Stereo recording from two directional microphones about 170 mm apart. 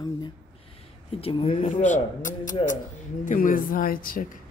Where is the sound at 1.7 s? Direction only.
45° left (ahead or behind).